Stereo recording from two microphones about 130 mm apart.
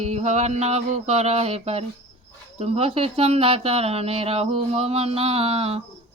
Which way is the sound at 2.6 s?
50° right (ahead or behind).